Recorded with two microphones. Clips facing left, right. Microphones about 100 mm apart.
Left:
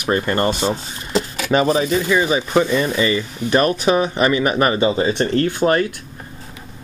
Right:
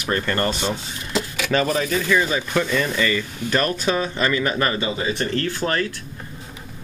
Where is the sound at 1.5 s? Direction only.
25° left (ahead or behind).